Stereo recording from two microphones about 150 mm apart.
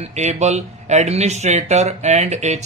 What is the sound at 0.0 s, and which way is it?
Speech, 50° right (ahead or behind).